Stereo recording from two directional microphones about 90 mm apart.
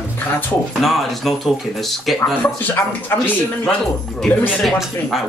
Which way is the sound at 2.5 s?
20° left (ahead or behind).